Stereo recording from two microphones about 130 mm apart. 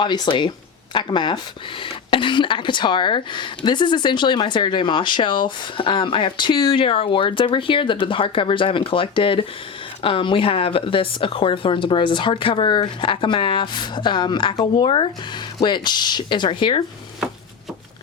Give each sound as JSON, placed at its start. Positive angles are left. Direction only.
{"t": 0.0, "sound": "speech", "side_deg": 35}